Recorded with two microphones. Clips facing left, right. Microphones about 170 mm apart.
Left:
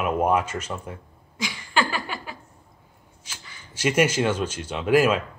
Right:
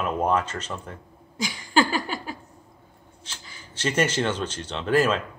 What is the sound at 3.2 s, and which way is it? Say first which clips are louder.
Speech: right 1 dB; 10° left (ahead or behind).